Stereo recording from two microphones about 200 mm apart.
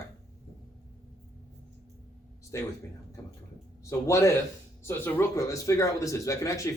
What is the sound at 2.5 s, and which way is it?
Speech, 15° left (ahead or behind).